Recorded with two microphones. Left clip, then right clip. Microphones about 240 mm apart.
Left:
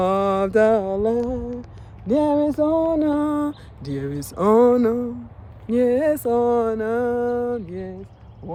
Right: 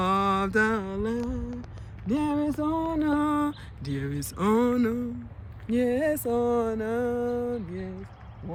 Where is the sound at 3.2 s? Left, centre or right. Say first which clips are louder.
Left 3 dB; right.